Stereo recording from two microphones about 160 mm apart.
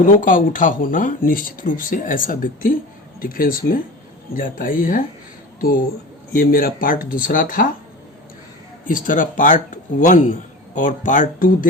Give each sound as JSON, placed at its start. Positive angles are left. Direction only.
{"t": 0.0, "sound": "speech", "side_deg": 55}
{"t": 8.8, "sound": "speech", "side_deg": 55}